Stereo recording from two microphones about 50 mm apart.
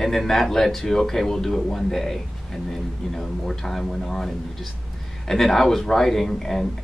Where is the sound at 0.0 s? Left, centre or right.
Centre.